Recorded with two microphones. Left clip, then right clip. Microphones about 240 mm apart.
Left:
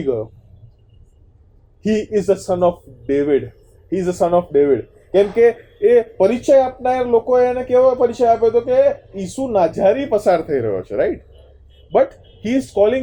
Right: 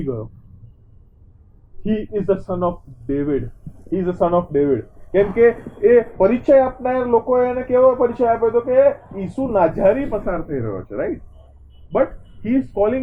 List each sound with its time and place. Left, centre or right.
0.0 s speech: left
1.8 s speech: left
4.4 s speech: left
5.1 s speech: left
12.4 s speech: left